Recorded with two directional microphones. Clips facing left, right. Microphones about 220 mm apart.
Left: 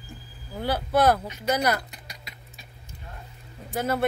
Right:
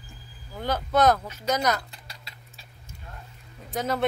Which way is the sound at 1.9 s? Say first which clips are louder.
Left 2 dB; 15° left (ahead or behind).